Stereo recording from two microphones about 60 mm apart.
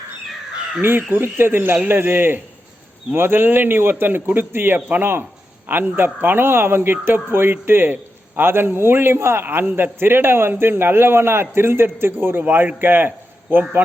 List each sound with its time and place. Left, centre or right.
0.8 s a man's voice: right